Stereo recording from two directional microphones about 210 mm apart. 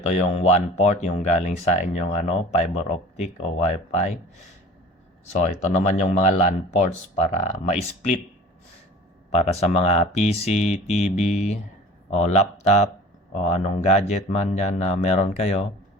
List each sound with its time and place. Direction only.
0.1 s speech: 30° left (ahead or behind)
5.2 s speech: 35° left (ahead or behind)
9.3 s speech: 30° left (ahead or behind)